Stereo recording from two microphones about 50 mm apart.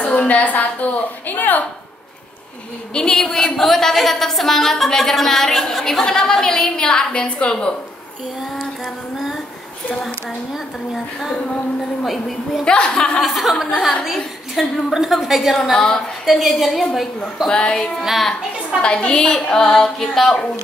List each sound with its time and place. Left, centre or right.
0.3 s a woman's voice: left
2.9 s a woman's voice: centre
8.4 s a woman's voice: centre
12.0 s a woman's voice: centre
12.6 s a woman's voice: centre
13.2 s a woman's voice: centre
14.6 s a woman's voice: centre
15.0 s a woman's voice: centre
17.5 s a woman's voice: centre
18.0 s a woman's voice: centre
18.8 s a woman's voice: left